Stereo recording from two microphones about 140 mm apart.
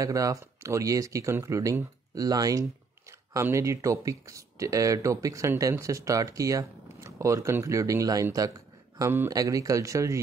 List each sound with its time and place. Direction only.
0.0 s speech: 25° right (ahead or behind)